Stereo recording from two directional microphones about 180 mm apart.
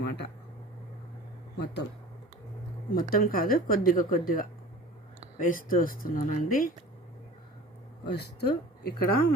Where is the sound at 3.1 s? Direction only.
55° left (ahead or behind).